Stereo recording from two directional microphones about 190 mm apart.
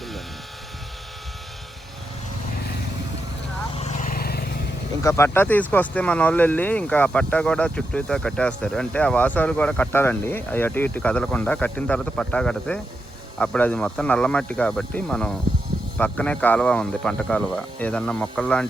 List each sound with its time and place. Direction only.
3.8 s vehicle: 40° left (ahead or behind); by 4.6 s 55° left (ahead or behind)
5.0 s speech: 15° left (ahead or behind)